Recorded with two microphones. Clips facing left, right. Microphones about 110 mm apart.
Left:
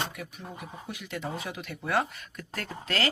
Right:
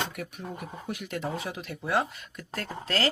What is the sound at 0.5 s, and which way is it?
Speech, 45° right (ahead or behind).